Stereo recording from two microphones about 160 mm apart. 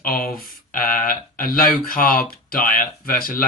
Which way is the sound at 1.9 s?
60° left (ahead or behind).